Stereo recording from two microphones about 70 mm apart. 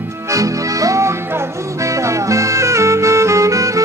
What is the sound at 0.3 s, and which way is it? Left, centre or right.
Music, right.